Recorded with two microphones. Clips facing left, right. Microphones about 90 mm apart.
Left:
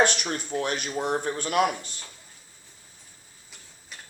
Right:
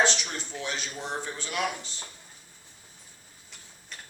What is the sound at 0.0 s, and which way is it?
Speech, 55° left (ahead or behind).